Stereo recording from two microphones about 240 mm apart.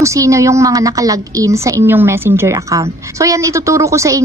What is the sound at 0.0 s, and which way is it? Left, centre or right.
A woman's voice, centre.